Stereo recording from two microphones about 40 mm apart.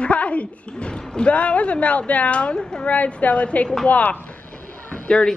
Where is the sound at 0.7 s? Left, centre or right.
Left.